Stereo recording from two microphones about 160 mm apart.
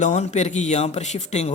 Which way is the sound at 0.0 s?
45° left (ahead or behind).